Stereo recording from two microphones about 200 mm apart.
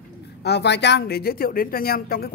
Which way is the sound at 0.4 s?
55° left (ahead or behind).